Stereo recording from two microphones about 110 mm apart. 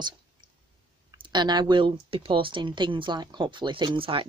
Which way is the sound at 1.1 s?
45° right (ahead or behind).